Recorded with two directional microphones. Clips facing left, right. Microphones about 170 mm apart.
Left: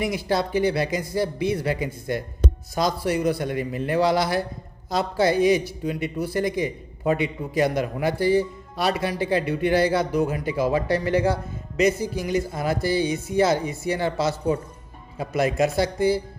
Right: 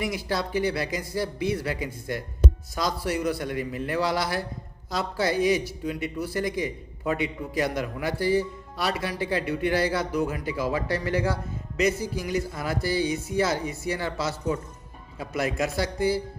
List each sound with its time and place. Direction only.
0.0 s a man's voice: 20° left (ahead or behind)